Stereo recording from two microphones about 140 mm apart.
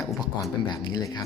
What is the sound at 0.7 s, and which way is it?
Speech, 30° left (ahead or behind).